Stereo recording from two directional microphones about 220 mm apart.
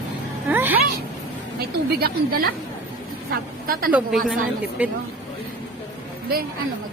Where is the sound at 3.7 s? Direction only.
40° right (ahead or behind).